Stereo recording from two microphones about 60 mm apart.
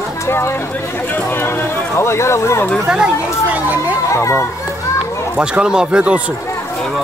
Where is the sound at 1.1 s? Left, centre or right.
Left.